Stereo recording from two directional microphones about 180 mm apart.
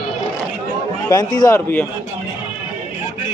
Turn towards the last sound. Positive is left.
turn(degrees=15)  # may be behind; listen again after turning